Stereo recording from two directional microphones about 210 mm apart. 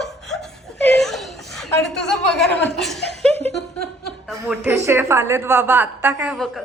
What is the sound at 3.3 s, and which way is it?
Laughter, 30° right (ahead or behind).